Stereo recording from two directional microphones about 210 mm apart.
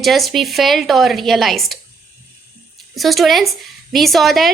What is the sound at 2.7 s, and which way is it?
A woman's voice, centre (ahead or behind).